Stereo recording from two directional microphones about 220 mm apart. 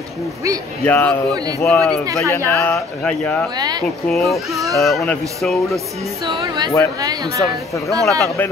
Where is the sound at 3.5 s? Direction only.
20° right (ahead or behind).